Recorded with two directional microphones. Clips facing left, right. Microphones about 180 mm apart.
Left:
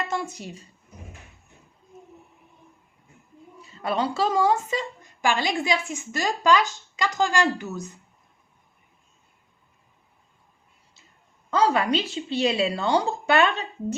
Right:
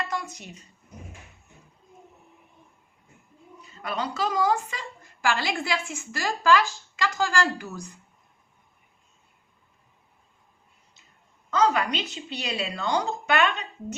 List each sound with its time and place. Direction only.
0.1 s speech: 30° left (ahead or behind)
3.8 s a woman's voice: 30° left (ahead or behind)
11.5 s a woman's voice: 30° left (ahead or behind)